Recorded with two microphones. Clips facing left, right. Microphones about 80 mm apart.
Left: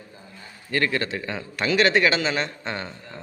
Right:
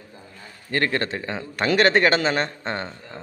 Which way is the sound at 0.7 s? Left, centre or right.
Right.